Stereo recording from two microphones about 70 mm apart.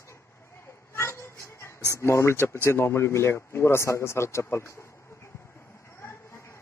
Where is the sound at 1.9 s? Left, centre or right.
Left.